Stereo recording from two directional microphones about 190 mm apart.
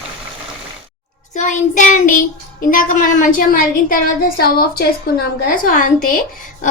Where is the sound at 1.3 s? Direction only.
40° left (ahead or behind).